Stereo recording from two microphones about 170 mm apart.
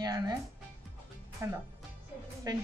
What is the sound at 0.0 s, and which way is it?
Music, 25° right (ahead or behind).